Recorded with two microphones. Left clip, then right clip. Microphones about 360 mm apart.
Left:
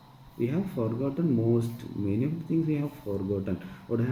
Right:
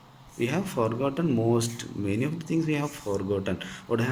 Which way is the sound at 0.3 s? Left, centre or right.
Right.